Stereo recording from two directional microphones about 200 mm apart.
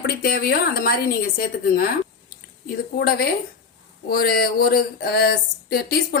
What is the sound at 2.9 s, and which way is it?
Speech, 50° left (ahead or behind).